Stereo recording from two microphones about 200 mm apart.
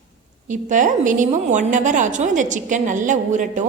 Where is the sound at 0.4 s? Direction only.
40° right (ahead or behind).